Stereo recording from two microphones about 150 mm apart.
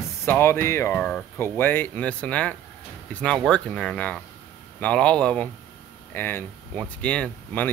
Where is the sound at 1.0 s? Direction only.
10° left (ahead or behind).